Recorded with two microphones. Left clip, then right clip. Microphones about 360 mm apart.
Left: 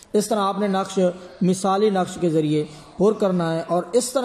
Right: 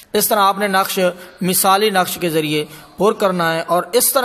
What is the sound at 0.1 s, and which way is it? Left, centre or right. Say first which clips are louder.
A man's voice: right 7 dB; right.